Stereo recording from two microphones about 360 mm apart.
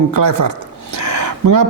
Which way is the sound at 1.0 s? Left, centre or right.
Right.